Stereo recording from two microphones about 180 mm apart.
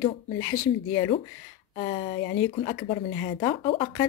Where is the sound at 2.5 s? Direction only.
30° left (ahead or behind).